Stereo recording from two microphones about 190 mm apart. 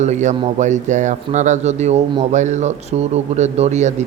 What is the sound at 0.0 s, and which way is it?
A man's voice, 40° right (ahead or behind).